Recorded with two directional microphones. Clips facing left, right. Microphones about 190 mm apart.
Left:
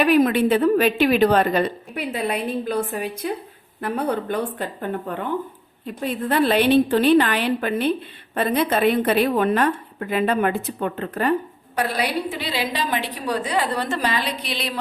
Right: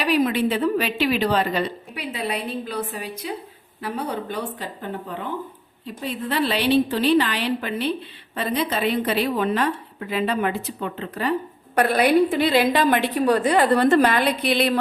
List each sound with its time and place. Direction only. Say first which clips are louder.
0.0 s a woman's voice: left 4 dB; 50° left (ahead or behind)
11.7 s a woman's voice: right 6 dB; 55° right (ahead or behind)